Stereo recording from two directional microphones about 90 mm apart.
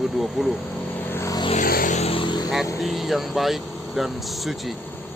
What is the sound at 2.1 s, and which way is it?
Vehicle, 65° left (ahead or behind).